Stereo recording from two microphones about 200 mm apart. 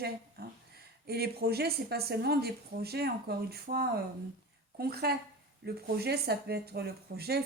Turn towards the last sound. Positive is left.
turn(degrees=-50)  # may be behind; listen again after turning